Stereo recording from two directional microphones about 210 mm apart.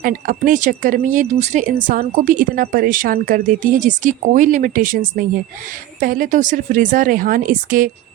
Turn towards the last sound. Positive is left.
turn(degrees=-40)  # may be behind; listen again after turning